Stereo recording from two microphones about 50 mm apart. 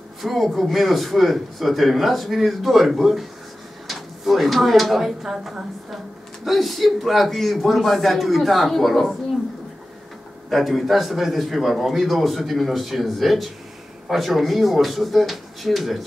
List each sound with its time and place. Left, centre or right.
0.2 s a man's voice: centre
10.5 s a man's voice: centre